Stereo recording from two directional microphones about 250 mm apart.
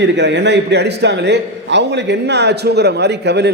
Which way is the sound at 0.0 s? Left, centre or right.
Right.